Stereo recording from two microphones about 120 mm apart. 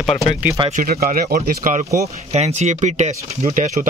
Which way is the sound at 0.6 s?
40° right (ahead or behind).